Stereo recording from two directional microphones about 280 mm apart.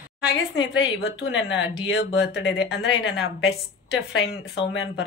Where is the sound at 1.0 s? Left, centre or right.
Left.